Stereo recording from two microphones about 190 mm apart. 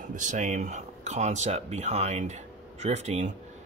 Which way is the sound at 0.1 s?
40° right (ahead or behind).